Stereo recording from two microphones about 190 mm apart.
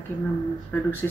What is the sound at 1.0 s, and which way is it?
Speech, 10° left (ahead or behind).